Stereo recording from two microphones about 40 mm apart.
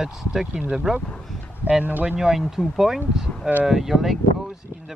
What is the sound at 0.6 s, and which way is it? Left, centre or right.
Speech, right.